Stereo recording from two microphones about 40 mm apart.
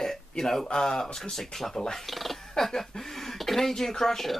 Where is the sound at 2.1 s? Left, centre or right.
Centre.